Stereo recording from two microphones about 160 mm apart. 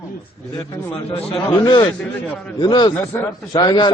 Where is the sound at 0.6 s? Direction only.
20° left (ahead or behind).